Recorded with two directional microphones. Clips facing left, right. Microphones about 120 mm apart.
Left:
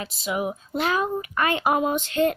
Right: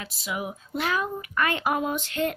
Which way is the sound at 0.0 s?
30° left (ahead or behind).